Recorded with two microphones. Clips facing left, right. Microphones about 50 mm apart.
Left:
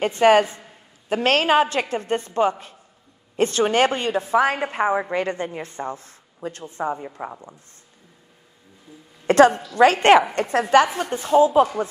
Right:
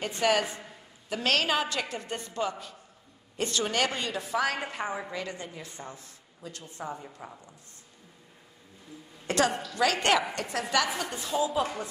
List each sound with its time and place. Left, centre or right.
0.0 s a woman's voice: left
9.2 s a woman's voice: left
9.5 s a woman's voice: centre
9.8 s speech: left